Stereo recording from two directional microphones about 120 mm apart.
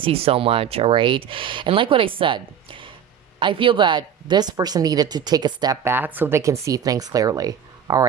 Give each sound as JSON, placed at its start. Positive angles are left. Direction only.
{"t": 0.0, "sound": "speech", "side_deg": -55}
{"t": 5.8, "sound": "speech", "side_deg": -15}